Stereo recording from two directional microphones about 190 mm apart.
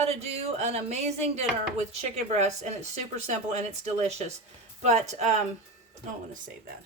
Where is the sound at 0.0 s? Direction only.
35° right (ahead or behind).